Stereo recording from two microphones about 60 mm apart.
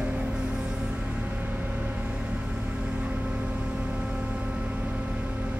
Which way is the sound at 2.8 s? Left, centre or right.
Centre.